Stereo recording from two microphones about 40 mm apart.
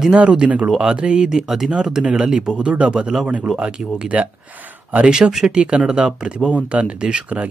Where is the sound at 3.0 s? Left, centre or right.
Centre.